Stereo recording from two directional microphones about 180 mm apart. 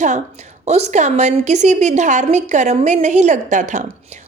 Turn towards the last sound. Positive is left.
turn(degrees=-45)  # may be behind; listen again after turning